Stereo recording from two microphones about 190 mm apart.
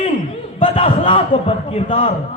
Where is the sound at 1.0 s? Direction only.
25° left (ahead or behind).